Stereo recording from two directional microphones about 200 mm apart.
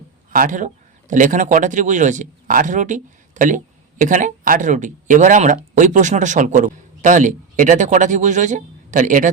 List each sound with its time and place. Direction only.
0.3 s a man's voice: 40° right (ahead or behind)